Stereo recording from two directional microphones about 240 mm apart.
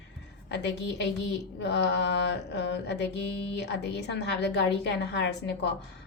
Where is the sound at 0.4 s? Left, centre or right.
Left.